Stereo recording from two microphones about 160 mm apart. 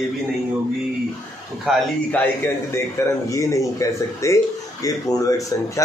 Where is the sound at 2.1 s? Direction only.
10° left (ahead or behind).